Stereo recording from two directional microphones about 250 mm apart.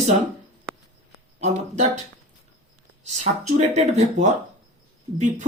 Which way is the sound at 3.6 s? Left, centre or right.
Right.